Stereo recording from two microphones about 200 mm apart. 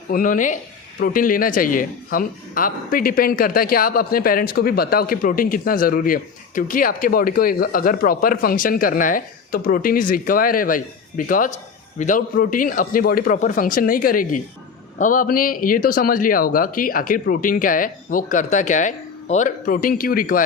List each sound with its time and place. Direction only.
0.1 s speech: 40° left (ahead or behind)